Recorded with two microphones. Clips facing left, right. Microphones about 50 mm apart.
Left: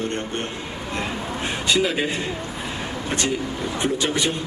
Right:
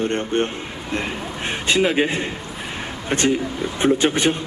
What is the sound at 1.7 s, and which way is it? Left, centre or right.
A man's voice, right.